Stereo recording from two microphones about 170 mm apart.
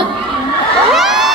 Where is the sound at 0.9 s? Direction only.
Centre (ahead or behind).